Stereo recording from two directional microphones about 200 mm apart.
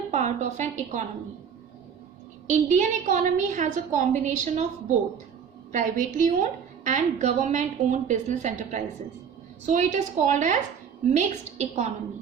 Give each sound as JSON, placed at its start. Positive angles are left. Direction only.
{"t": 0.1, "sound": "a woman's voice", "side_deg": -35}
{"t": 2.5, "sound": "a woman's voice", "side_deg": -35}
{"t": 5.7, "sound": "a woman's voice", "side_deg": -40}